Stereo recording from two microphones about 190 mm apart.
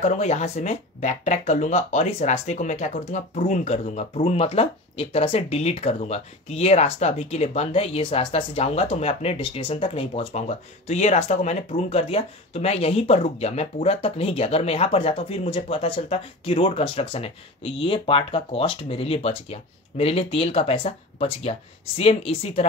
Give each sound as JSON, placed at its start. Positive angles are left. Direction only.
{"t": 0.0, "sound": "speech", "side_deg": 35}